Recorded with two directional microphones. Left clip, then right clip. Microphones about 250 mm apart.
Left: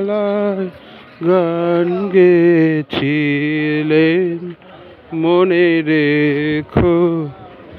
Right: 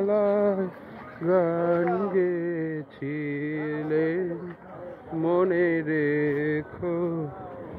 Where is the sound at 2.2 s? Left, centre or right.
Left.